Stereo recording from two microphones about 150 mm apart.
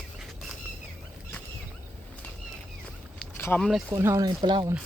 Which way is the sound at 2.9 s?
10° left (ahead or behind).